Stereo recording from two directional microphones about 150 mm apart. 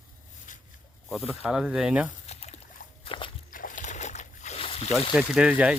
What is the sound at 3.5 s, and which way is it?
Boat, 60° left (ahead or behind).